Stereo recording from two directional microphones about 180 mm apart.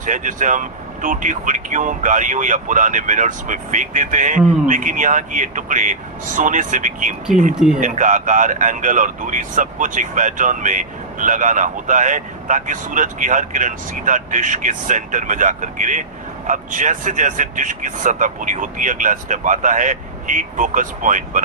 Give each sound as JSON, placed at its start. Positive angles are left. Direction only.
{"t": 0.0, "sound": "speech", "side_deg": -45}